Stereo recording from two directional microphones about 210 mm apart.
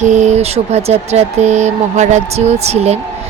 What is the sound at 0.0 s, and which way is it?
A woman's voice, 35° right (ahead or behind).